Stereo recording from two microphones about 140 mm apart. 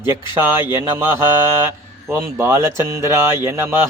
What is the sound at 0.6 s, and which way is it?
Speech, 20° right (ahead or behind).